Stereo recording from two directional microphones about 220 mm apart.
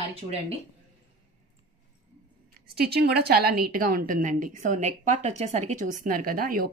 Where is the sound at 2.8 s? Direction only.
45° right (ahead or behind).